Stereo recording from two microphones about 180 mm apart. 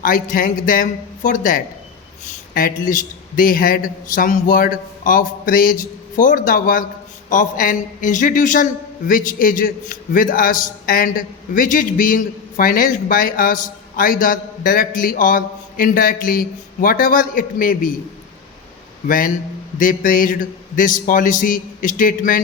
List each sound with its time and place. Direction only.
0.0 s a man's voice: 50° left (ahead or behind)
19.0 s a man's voice: 50° left (ahead or behind)